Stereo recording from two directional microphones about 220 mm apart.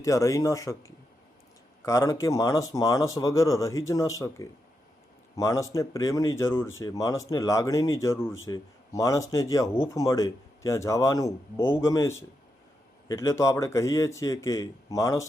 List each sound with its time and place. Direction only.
0.0 s speech: 15° left (ahead or behind)